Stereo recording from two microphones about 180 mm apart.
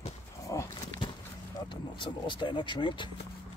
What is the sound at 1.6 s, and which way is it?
Speech, 25° left (ahead or behind).